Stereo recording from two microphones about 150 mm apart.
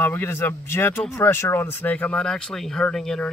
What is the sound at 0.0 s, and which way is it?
A man's voice, 15° left (ahead or behind).